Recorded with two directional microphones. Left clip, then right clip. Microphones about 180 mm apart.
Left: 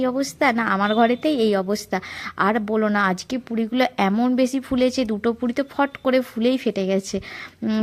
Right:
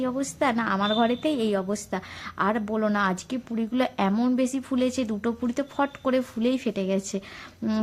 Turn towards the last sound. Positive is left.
turn(degrees=10)  # may be behind; listen again after turning